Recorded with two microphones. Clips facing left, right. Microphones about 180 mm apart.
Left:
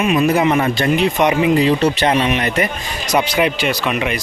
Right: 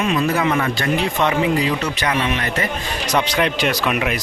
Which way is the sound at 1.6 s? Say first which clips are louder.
Left 7 dB; 30° left (ahead or behind).